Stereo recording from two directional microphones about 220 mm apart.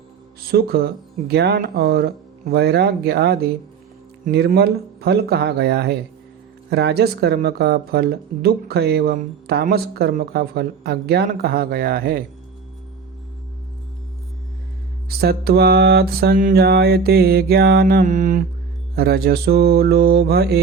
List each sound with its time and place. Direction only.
0.5 s speech: 45° right (ahead or behind)
15.2 s speech: 45° right (ahead or behind)